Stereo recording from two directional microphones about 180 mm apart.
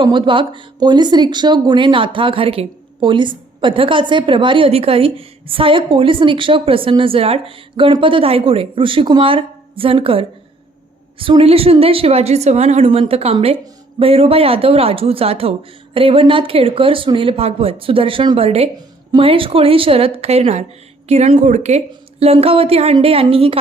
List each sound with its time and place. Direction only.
0.0 s a woman's voice: 25° right (ahead or behind)